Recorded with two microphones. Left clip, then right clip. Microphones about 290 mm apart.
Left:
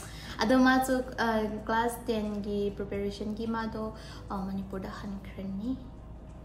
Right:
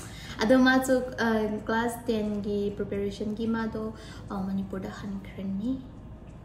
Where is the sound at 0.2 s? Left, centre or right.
Centre.